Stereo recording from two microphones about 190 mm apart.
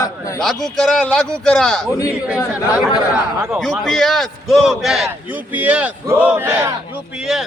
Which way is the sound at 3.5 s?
Centre (ahead or behind).